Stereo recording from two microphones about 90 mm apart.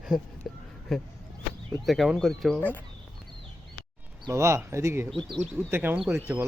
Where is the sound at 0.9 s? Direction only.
Centre (ahead or behind).